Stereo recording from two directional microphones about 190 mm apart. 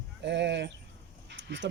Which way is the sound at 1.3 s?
65° right (ahead or behind).